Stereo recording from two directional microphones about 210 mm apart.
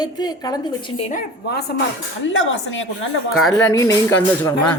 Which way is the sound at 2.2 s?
65° left (ahead or behind).